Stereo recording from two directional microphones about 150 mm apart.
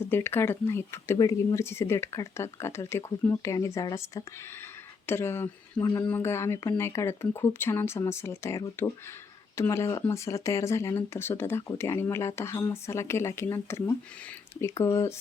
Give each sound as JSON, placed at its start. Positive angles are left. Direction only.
{"t": 0.1, "sound": "speech", "side_deg": 15}